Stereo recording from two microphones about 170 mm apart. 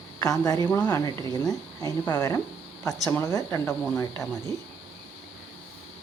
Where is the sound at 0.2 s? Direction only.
20° left (ahead or behind).